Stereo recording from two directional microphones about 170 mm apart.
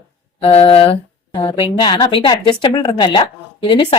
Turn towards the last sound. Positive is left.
turn(degrees=30)  # may be behind; listen again after turning